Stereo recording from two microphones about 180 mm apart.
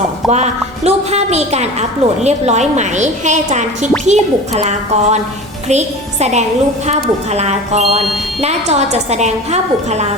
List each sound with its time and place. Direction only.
0.3 s a woman's voice: 40° right (ahead or behind)